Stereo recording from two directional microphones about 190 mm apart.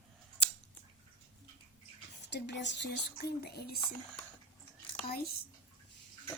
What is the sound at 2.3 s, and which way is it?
Speech, 65° left (ahead or behind).